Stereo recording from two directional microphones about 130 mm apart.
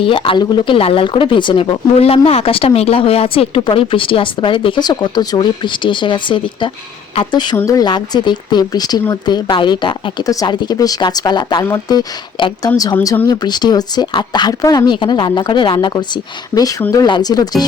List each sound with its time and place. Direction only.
0.0 s speech: 40° left (ahead or behind)